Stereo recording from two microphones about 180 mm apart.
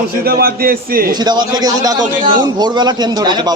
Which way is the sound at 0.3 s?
55° right (ahead or behind).